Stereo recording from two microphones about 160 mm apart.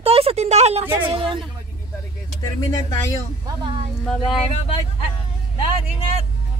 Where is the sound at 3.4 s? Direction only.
30° right (ahead or behind).